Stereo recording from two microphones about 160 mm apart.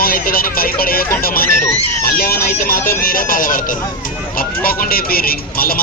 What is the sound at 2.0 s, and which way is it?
Speech, 70° left (ahead or behind).